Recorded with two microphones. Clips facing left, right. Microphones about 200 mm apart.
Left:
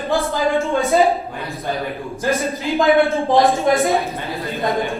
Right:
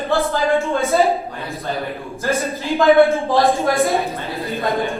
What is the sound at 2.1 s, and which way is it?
A man's voice, 15° left (ahead or behind).